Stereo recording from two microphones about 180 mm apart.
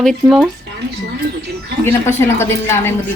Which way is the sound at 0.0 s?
Centre (ahead or behind).